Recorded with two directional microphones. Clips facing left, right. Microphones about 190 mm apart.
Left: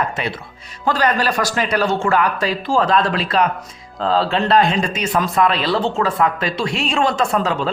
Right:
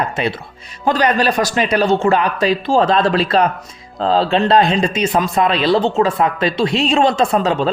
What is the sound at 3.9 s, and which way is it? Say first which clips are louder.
Speech: right 3 dB; 20° right (ahead or behind).